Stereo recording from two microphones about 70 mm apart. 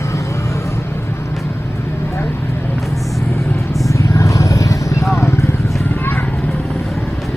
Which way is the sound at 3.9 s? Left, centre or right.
Left.